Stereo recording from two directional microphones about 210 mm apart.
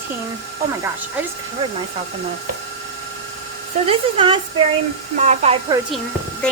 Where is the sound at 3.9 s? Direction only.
25° right (ahead or behind).